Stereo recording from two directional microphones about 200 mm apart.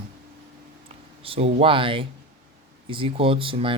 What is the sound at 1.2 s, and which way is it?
Speech, 30° right (ahead or behind).